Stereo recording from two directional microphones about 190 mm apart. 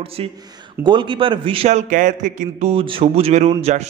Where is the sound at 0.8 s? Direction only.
25° right (ahead or behind).